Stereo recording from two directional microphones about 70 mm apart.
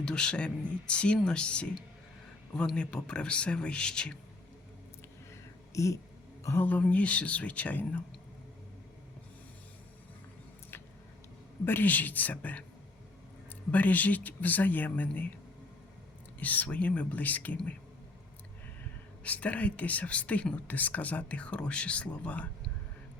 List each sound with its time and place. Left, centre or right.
0.0 s speech: centre
5.3 s a sound: left
6.4 s a woman's voice: left
6.7 s speech: left
11.6 s speech: left
13.7 s speech: left
16.4 s speech: left
19.2 s speech: centre